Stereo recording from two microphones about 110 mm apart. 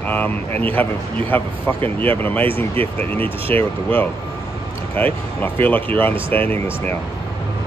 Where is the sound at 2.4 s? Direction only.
55° right (ahead or behind).